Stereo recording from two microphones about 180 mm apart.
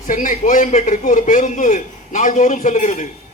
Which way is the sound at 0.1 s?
45° left (ahead or behind).